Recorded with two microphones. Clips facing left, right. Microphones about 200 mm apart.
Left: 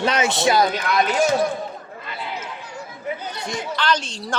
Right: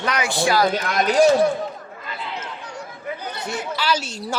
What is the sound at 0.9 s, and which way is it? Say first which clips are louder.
Speech: right 3 dB; 45° right (ahead or behind).